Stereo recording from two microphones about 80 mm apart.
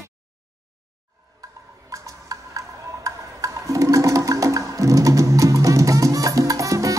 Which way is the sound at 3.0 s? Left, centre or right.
Right.